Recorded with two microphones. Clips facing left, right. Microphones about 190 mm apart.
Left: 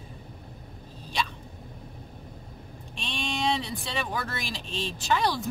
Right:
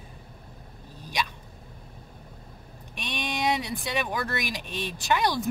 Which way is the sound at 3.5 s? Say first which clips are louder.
Right 2 dB; 15° right (ahead or behind).